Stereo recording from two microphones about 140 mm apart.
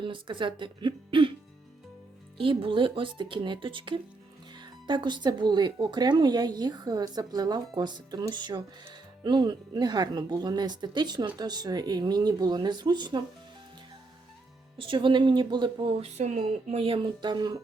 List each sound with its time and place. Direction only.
0.0 s speech: 35° right (ahead or behind)
2.4 s speech: 40° right (ahead or behind)
14.8 s speech: 35° right (ahead or behind)
16.0 s speech: 55° right (ahead or behind); by 17.6 s 30° right (ahead or behind)